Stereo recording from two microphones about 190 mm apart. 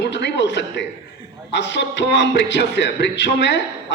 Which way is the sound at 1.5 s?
65° left (ahead or behind).